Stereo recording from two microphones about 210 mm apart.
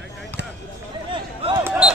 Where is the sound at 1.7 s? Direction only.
5° right (ahead or behind).